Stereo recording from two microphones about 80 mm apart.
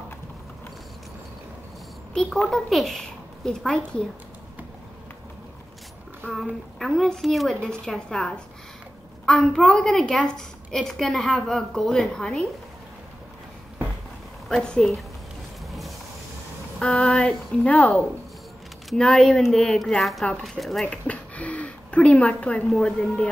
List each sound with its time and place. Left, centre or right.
2.4 s a woman's voice: centre
6.2 s a woman's voice: centre
14.5 s a woman's voice: centre
16.8 s a woman's voice: centre